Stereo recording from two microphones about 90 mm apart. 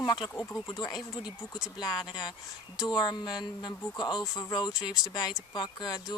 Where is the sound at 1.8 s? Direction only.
55° left (ahead or behind).